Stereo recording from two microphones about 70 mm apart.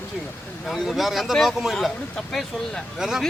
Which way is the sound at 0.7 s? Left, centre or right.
Centre.